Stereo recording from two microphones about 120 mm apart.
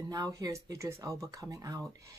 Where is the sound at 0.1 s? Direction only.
30° right (ahead or behind).